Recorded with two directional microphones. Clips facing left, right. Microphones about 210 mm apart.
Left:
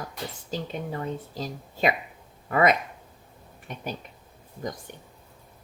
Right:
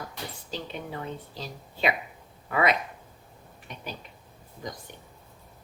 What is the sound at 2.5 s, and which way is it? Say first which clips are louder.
Speech: left 3 dB; 45° left (ahead or behind).